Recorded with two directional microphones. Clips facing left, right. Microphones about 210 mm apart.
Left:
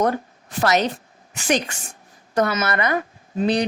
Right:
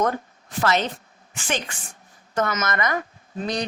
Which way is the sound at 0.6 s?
40° left (ahead or behind).